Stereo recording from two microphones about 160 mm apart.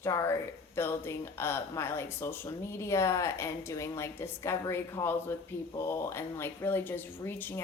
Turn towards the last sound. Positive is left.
turn(degrees=15)  # may be behind; listen again after turning